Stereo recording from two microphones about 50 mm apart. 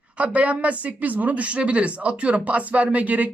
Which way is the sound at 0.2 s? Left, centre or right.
Right.